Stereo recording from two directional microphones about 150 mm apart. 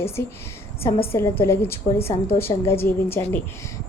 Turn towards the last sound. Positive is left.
turn(degrees=15)  # may be behind; listen again after turning